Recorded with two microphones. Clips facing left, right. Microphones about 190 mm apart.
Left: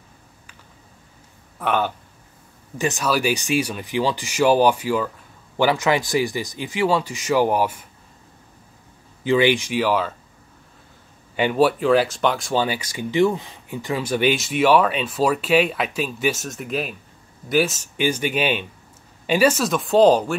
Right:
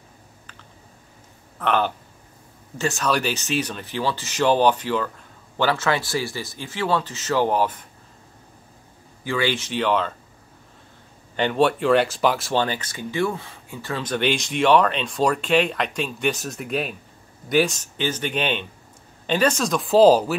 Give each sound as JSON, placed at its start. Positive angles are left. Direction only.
{"t": 1.6, "sound": "speech", "side_deg": 5}
{"t": 9.2, "sound": "speech", "side_deg": 20}
{"t": 11.3, "sound": "speech", "side_deg": 5}